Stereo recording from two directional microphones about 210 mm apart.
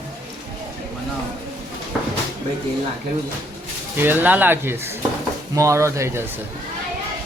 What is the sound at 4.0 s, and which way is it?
Speech, 10° right (ahead or behind).